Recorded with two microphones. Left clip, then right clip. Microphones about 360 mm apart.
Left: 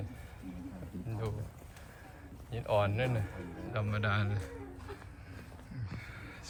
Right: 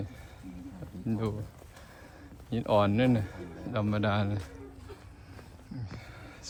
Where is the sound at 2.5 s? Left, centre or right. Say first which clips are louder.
Right 5 dB; centre.